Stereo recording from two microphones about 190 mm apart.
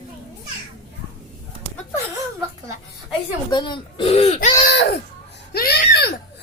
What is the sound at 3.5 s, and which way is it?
Speech, 25° left (ahead or behind).